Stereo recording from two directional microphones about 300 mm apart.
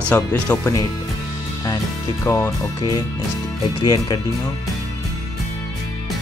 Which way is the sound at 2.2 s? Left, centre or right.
Centre.